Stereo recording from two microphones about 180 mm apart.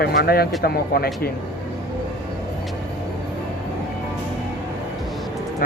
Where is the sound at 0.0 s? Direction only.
60° left (ahead or behind).